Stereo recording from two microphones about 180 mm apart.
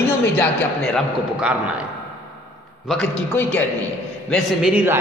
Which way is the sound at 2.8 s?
5° left (ahead or behind).